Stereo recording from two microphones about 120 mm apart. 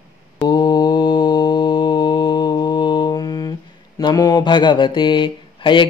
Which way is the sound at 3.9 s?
35° left (ahead or behind).